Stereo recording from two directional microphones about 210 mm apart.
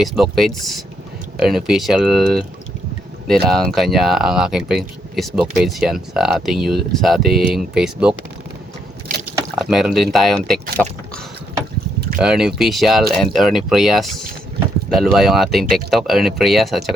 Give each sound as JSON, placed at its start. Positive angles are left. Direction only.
{"t": 0.0, "sound": "speech", "side_deg": 0}
{"t": 9.1, "sound": "rowboat", "side_deg": -35}
{"t": 9.6, "sound": "speech", "side_deg": -5}
{"t": 12.2, "sound": "speech", "side_deg": -5}